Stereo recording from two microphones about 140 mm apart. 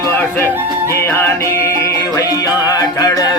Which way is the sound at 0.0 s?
15° left (ahead or behind).